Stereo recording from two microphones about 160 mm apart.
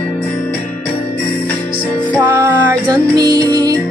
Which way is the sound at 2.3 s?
15° right (ahead or behind).